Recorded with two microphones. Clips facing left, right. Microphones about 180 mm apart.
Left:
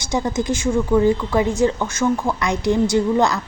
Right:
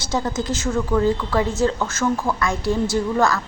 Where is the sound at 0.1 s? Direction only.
15° left (ahead or behind).